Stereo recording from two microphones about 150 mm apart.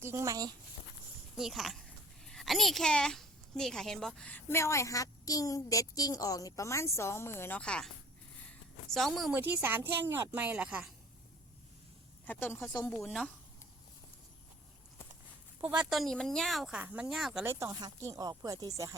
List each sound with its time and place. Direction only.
0.0 s speech: 15° right (ahead or behind)
1.4 s a child's voice: centre (ahead or behind)
8.9 s speech: centre (ahead or behind)
9.3 s speech: 15° right (ahead or behind)
12.2 s a child's voice: 10° left (ahead or behind)
12.9 s speech: 5° left (ahead or behind)
15.6 s speech: 5° right (ahead or behind)
17.4 s speech: 20° right (ahead or behind)